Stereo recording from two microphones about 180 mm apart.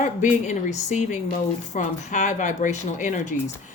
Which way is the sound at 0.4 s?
45° left (ahead or behind).